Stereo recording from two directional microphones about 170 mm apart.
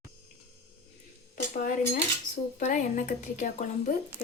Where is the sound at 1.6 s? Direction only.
50° left (ahead or behind).